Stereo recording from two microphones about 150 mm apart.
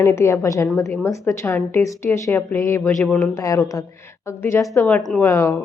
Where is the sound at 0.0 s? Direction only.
15° left (ahead or behind).